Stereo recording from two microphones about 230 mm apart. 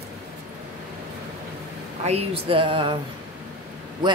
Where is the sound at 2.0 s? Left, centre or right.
Right.